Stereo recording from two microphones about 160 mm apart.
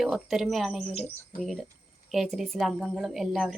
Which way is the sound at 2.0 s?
Centre (ahead or behind).